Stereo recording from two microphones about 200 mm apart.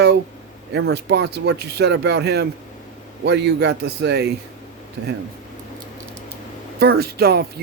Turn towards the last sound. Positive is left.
turn(degrees=-50)  # may be behind; listen again after turning